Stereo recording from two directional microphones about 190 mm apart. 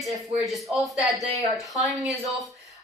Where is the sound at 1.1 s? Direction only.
Centre (ahead or behind).